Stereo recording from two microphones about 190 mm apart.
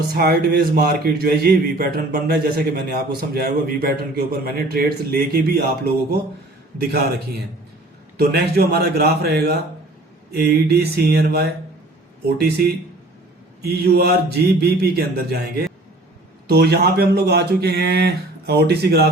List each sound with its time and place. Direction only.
0.1 s a man's voice: 55° right (ahead or behind)
8.2 s a man's voice: 55° right (ahead or behind)
13.6 s a man's voice: 60° right (ahead or behind)